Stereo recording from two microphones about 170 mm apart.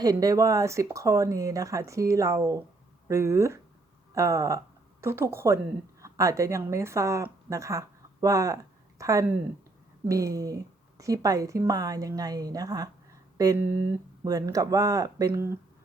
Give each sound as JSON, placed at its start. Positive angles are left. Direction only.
{"t": 0.0, "sound": "a woman's voice", "side_deg": -20}